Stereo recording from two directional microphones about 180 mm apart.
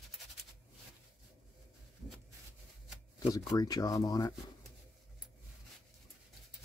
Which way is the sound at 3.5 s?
20° left (ahead or behind).